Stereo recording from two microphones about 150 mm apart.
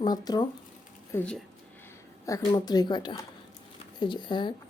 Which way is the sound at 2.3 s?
25° left (ahead or behind).